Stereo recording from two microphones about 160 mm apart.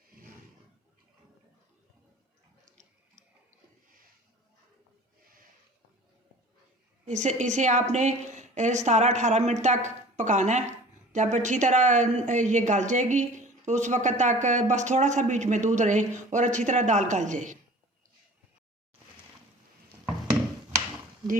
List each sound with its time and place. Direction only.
7.0 s a woman's voice: 50° right (ahead or behind)